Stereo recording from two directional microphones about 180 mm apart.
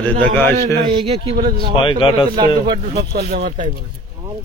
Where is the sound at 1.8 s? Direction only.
25° left (ahead or behind).